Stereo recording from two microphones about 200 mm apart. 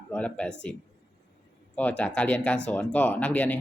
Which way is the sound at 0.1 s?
5° left (ahead or behind).